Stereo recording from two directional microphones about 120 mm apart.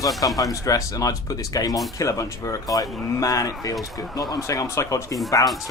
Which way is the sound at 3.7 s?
Centre (ahead or behind).